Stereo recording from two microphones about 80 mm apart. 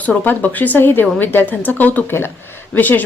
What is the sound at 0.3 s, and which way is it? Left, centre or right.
A woman's voice, left.